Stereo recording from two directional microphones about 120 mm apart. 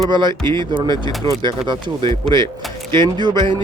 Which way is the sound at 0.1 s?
40° right (ahead or behind).